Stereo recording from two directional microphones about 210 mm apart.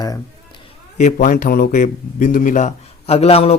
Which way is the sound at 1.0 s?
35° left (ahead or behind).